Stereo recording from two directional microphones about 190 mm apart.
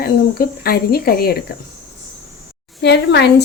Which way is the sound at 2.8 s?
60° left (ahead or behind).